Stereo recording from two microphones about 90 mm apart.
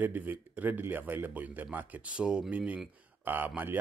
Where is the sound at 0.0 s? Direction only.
20° right (ahead or behind).